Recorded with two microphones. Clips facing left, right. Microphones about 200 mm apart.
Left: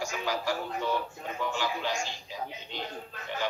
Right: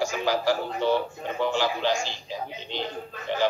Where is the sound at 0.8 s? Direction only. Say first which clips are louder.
Right 8 dB; 90° right.